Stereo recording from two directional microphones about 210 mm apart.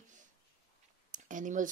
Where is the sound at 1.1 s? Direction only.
40° right (ahead or behind).